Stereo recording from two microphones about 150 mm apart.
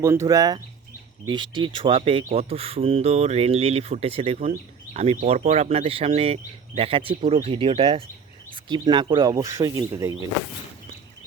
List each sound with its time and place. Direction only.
0.0 s speech: 20° right (ahead or behind)